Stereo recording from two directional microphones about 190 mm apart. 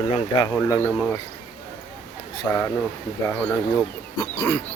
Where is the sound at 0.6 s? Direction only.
10° left (ahead or behind).